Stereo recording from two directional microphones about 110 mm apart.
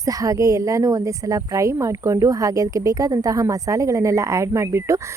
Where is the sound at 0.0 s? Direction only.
30° right (ahead or behind).